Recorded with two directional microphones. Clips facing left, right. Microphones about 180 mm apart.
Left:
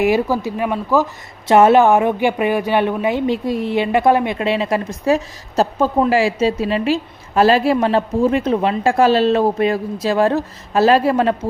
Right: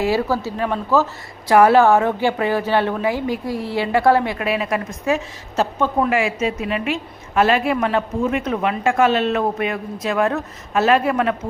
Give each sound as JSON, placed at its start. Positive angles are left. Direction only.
{"t": 0.0, "sound": "speech", "side_deg": 15}
{"t": 1.5, "sound": "a woman's voice", "side_deg": 25}